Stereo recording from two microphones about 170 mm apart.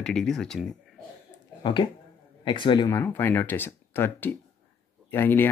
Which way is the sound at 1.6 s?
30° left (ahead or behind).